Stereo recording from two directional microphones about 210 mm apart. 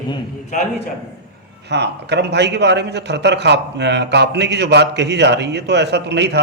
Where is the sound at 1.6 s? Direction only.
55° right (ahead or behind).